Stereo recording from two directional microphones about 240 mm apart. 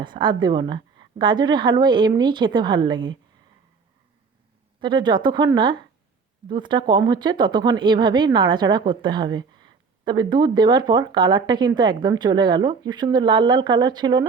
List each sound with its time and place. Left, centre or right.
0.0 s a woman's voice: centre
4.8 s a woman's voice: centre